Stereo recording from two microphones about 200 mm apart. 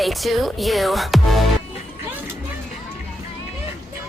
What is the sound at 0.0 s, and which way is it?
Speech, centre (ahead or behind).